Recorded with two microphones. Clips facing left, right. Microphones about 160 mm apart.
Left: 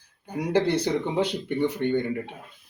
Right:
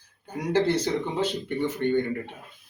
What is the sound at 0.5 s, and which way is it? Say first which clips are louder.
Speech: even; 10° left (ahead or behind).